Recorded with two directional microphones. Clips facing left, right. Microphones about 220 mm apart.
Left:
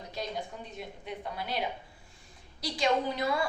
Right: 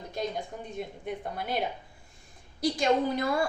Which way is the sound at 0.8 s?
50° right (ahead or behind).